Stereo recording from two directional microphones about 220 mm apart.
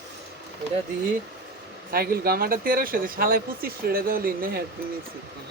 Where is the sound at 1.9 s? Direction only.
40° right (ahead or behind).